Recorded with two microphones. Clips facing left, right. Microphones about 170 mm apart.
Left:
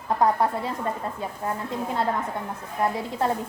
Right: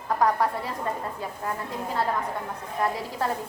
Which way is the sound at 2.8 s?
25° left (ahead or behind).